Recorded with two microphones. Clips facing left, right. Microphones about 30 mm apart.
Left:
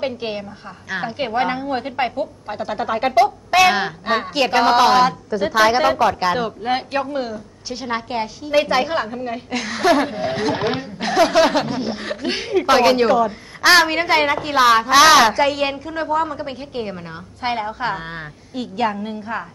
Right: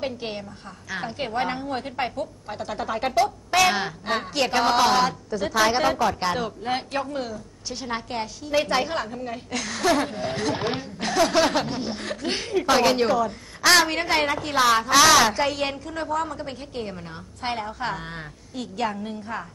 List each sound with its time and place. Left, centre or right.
0.0 s a woman's voice: left
11.5 s chuckle: centre
11.8 s a woman's voice: left
15.3 s a woman's voice: centre
15.6 s a woman's voice: left